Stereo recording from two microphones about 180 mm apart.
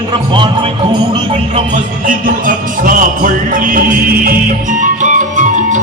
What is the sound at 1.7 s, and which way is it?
Music, 50° right (ahead or behind).